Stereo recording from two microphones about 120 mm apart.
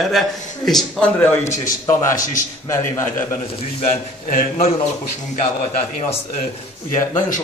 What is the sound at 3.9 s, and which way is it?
Speech, 90° left.